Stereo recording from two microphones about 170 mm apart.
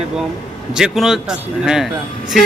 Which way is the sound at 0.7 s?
5° right (ahead or behind).